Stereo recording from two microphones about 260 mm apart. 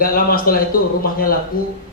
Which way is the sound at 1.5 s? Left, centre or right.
Left.